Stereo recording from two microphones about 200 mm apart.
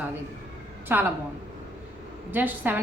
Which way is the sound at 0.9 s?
10° right (ahead or behind).